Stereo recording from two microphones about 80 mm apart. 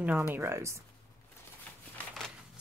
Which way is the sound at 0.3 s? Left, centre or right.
Right.